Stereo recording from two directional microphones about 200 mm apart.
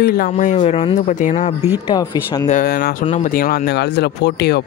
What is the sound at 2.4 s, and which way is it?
Speech, 45° left (ahead or behind).